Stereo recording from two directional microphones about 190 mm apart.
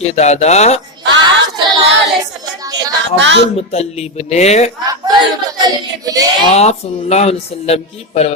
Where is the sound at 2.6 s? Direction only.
20° right (ahead or behind).